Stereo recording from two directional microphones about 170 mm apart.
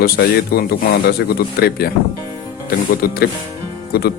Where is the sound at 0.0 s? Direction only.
65° left (ahead or behind).